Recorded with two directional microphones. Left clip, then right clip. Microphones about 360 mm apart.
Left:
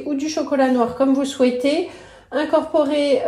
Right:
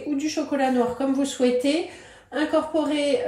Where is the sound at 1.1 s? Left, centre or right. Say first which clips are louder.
Left 4 dB; centre.